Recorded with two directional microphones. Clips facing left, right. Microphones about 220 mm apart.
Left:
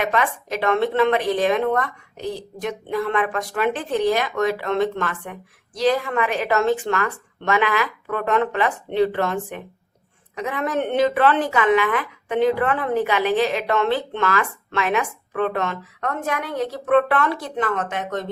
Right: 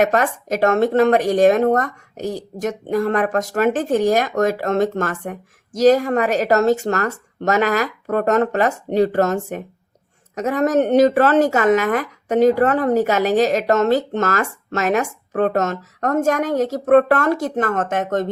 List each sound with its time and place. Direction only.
0.0 s speech: 45° right (ahead or behind)